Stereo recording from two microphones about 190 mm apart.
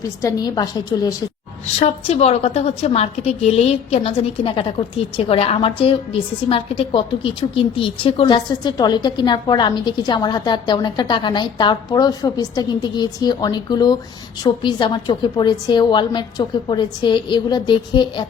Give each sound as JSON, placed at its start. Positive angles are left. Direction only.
{"t": 0.2, "sound": "a woman's voice", "side_deg": 20}
{"t": 1.8, "sound": "a woman's voice", "side_deg": 35}